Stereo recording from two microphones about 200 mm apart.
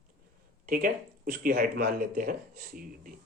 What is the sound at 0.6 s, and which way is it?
Speech, 45° right (ahead or behind).